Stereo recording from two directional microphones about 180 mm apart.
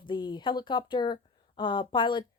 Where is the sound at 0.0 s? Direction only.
25° left (ahead or behind).